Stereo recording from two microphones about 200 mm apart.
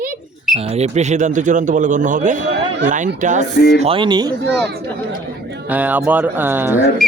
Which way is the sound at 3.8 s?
30° right (ahead or behind).